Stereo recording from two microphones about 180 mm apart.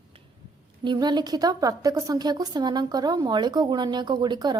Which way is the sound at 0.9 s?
25° right (ahead or behind).